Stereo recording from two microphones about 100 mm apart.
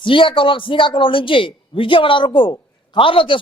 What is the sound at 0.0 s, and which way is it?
A man's voice, 55° left (ahead or behind).